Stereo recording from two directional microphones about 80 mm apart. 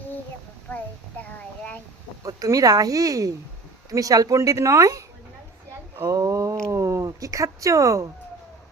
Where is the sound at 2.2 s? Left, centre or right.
Right.